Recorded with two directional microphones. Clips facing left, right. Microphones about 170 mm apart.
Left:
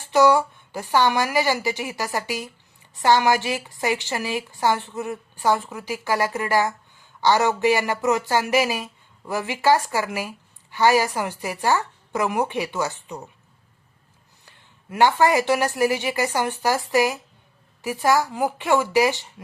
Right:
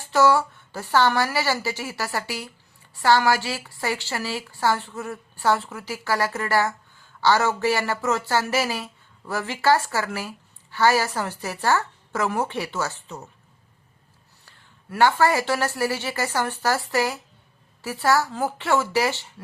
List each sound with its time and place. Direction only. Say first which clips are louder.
0.0 s a woman's voice: left 2 dB; 15° left (ahead or behind)
14.8 s speech: left 1 dB; 20° left (ahead or behind)